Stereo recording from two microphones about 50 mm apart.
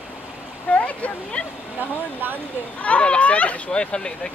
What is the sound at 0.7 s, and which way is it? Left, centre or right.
Speech, left.